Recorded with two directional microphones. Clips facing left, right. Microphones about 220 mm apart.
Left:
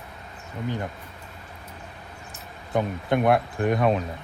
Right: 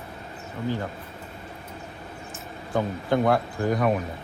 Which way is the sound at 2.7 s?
20° left (ahead or behind).